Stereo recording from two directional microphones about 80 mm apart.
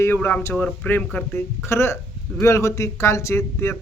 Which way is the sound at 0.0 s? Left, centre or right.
Left.